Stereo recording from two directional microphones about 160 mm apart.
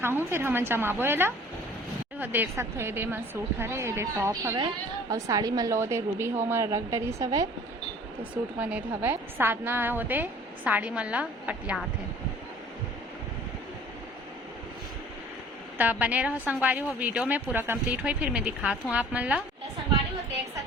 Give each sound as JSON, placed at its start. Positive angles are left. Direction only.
{"t": 0.0, "sound": "a woman's voice", "side_deg": -15}
{"t": 8.5, "sound": "a woman's voice", "side_deg": -10}
{"t": 15.8, "sound": "a woman's voice", "side_deg": -10}